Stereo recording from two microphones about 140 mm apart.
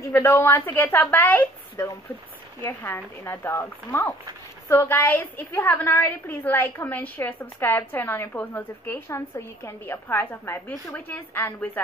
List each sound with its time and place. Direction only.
0.0 s a woman's voice: 15° left (ahead or behind)